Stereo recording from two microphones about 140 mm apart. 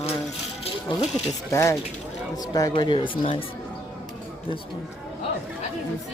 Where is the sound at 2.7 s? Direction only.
35° left (ahead or behind).